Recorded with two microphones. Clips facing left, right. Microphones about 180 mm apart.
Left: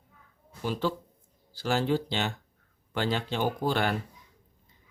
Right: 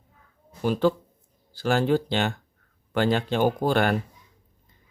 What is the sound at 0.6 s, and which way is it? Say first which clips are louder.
Speech: right 7 dB; 55° right (ahead or behind).